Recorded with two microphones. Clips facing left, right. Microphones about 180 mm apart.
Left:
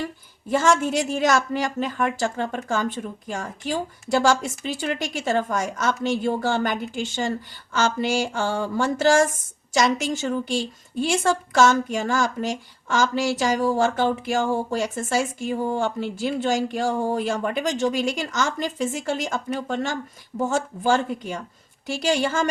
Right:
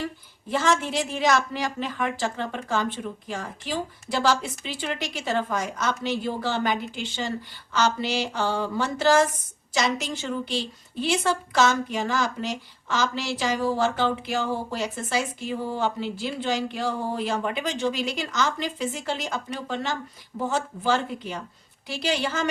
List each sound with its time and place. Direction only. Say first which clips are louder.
0.4 s a woman's voice: left 4 dB; 45° left (ahead or behind)